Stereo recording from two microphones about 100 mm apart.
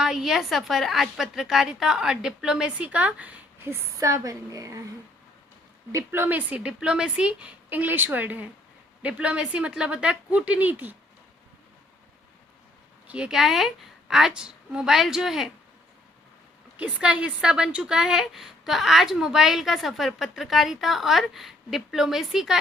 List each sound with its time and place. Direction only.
0.0 s a woman's voice: 5° right (ahead or behind); by 4.8 s 35° right (ahead or behind)
5.9 s a woman's voice: 25° right (ahead or behind)
13.1 s a woman's voice: 10° right (ahead or behind)
16.7 s a woman's voice: 10° right (ahead or behind)